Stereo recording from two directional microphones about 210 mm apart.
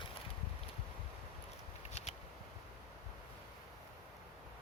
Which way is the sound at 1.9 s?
30° left (ahead or behind).